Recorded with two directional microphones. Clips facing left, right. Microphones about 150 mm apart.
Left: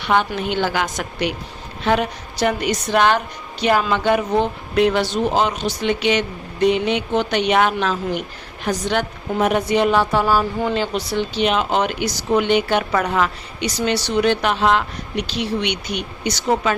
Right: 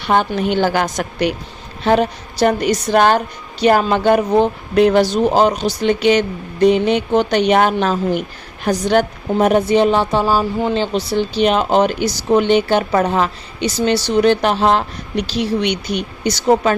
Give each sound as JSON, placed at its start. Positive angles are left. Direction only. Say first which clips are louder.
{"t": 0.0, "sound": "a woman's voice", "louder": "right 3 dB", "side_deg": -40}
{"t": 11.4, "sound": "a woman's voice", "louder": "right 5 dB", "side_deg": -40}